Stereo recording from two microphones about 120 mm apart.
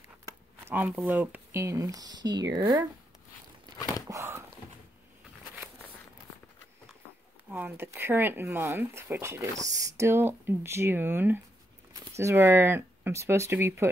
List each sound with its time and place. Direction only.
0.7 s speech: 15° right (ahead or behind)
4.1 s a sound: 20° right (ahead or behind)
7.5 s speech: 15° right (ahead or behind)